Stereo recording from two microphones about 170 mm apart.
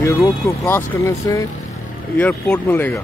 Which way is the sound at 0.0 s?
15° left (ahead or behind).